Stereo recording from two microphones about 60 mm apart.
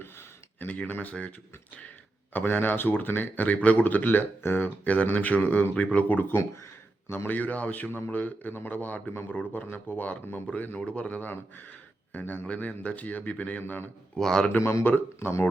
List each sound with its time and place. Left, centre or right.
0.0 s a sound: left
0.7 s speech: left
2.3 s speech: left
9.6 s speech: left
10.4 s speech: left
11.2 s speech: left
14.2 s a man's voice: centre
14.6 s speech: left
14.8 s speech: left